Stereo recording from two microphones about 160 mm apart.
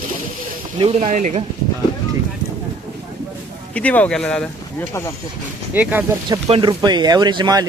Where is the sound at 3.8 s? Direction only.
10° left (ahead or behind).